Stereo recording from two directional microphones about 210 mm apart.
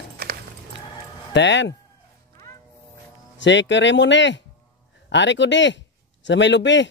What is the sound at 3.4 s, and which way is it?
Speech, 60° left (ahead or behind).